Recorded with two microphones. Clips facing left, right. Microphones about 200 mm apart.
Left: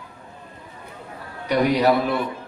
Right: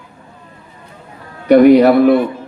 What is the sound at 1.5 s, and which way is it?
Speech, 55° right (ahead or behind).